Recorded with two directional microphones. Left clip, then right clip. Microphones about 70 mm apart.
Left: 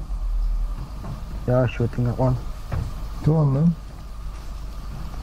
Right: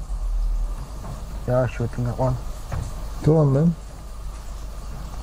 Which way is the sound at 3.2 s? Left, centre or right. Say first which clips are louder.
Right 5 dB; right.